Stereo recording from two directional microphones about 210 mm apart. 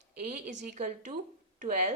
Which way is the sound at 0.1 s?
40° right (ahead or behind).